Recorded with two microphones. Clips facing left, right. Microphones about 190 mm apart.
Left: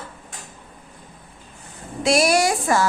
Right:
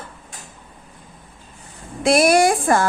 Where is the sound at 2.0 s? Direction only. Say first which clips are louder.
Right 3 dB; 55° right (ahead or behind).